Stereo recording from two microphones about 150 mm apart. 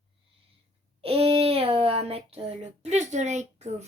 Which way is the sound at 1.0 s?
40° right (ahead or behind).